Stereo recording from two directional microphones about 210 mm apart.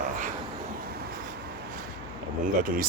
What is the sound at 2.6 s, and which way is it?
Speech, 40° right (ahead or behind).